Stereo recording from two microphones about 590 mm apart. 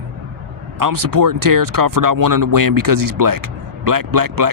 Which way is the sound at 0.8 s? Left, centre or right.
Right.